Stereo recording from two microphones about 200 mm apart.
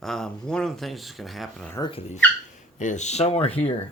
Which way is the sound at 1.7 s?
25° left (ahead or behind).